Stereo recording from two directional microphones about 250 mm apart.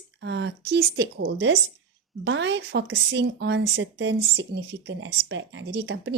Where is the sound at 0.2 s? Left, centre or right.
Right.